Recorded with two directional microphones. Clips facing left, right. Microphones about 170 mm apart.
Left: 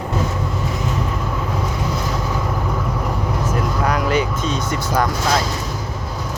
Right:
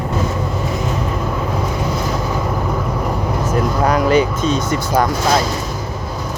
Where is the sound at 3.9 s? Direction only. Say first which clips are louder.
Right 6 dB; 30° right (ahead or behind).